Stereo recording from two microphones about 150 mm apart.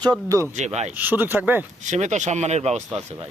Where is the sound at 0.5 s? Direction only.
50° right (ahead or behind).